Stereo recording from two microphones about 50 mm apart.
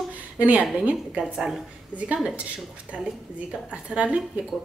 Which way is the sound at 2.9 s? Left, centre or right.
Right.